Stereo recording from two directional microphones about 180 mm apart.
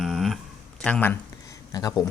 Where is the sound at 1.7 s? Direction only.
20° left (ahead or behind).